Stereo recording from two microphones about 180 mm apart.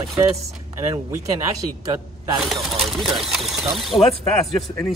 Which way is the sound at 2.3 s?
Centre (ahead or behind).